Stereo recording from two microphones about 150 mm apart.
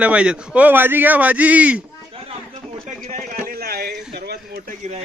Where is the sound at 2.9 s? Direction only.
60° right (ahead or behind); by 4.7 s 90° right.